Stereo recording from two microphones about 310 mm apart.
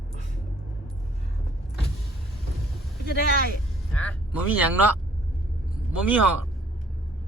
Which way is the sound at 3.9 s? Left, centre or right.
Centre.